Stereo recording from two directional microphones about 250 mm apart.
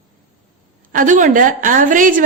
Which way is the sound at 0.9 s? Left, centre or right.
Right.